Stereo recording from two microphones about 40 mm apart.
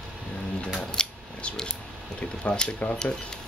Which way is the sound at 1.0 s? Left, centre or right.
Centre.